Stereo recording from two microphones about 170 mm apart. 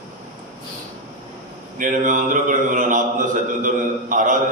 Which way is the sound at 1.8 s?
50° right (ahead or behind).